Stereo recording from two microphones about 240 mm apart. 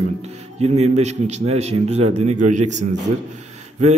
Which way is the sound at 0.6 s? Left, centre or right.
Right.